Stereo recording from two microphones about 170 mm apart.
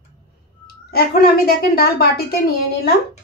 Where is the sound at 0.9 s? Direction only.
60° left (ahead or behind).